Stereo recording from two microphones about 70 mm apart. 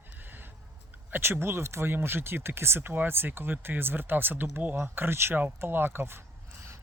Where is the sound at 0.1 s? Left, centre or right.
Right.